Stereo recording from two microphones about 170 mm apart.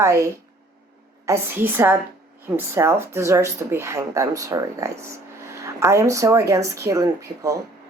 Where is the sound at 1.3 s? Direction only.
15° right (ahead or behind).